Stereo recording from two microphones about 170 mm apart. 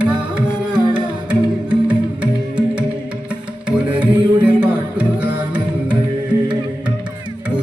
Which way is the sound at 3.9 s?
10° right (ahead or behind).